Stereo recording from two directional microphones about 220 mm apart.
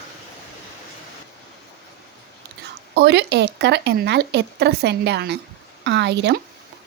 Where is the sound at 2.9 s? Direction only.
50° right (ahead or behind).